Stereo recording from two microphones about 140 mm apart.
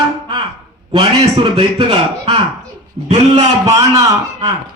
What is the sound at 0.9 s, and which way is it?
A man's voice, 45° right (ahead or behind).